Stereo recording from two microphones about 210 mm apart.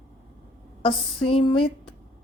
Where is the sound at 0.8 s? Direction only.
25° left (ahead or behind).